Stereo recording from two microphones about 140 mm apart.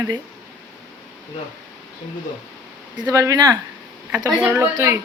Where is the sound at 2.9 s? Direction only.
25° right (ahead or behind).